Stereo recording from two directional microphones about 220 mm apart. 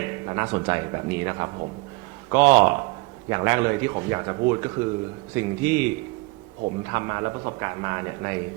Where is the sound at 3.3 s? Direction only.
20° right (ahead or behind).